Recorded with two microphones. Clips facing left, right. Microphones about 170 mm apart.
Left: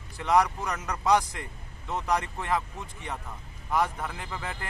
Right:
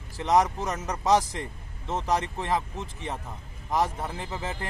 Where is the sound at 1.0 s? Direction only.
35° right (ahead or behind).